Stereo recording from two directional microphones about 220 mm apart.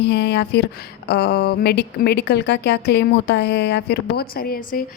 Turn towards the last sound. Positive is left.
turn(degrees=40)  # may be behind; listen again after turning